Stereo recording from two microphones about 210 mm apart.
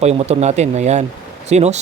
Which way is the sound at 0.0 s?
30° right (ahead or behind).